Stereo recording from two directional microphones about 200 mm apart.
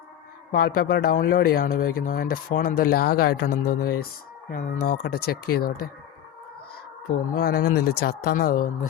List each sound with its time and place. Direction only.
0.5 s speech: 45° left (ahead or behind)
7.3 s speech: 50° left (ahead or behind)